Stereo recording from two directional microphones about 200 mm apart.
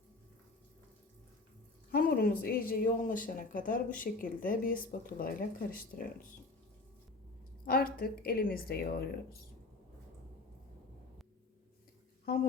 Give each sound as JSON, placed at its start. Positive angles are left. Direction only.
{"t": 1.9, "sound": "speech", "side_deg": 50}
{"t": 7.6, "sound": "speech", "side_deg": 45}